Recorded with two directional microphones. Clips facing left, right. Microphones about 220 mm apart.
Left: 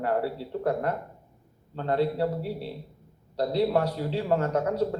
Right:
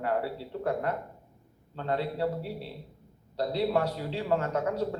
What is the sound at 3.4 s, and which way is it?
Speech, 40° left (ahead or behind).